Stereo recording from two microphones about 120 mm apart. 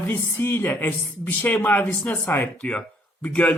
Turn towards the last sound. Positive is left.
turn(degrees=10)  # may be behind; listen again after turning